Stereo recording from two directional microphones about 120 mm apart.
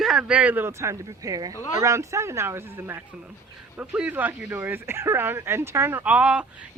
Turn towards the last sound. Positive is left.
turn(degrees=-10)  # may be behind; listen again after turning